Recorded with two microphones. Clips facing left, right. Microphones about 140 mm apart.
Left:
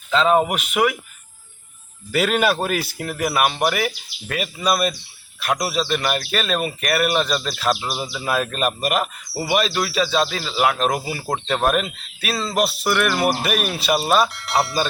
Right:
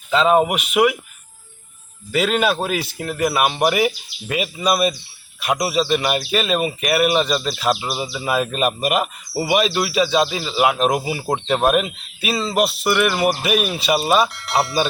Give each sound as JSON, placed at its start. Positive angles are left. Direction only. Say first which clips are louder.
{"t": 0.1, "sound": "speech", "louder": "right 2 dB", "side_deg": -10}
{"t": 2.1, "sound": "speech", "louder": "even", "side_deg": 0}